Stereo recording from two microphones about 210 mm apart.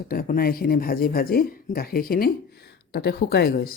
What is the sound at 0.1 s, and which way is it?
Speech, 45° left (ahead or behind).